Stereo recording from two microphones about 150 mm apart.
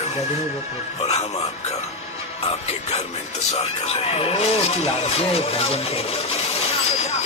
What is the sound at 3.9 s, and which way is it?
Speech, 40° left (ahead or behind).